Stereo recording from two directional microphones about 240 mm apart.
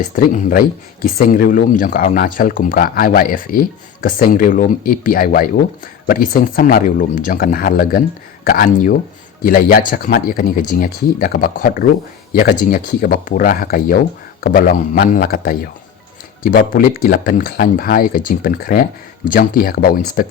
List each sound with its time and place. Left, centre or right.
0.2 s speech: left